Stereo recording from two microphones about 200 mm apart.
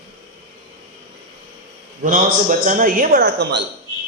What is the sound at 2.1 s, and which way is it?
A man's voice, 40° right (ahead or behind).